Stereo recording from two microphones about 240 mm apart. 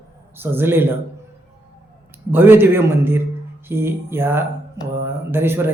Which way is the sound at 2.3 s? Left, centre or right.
Centre.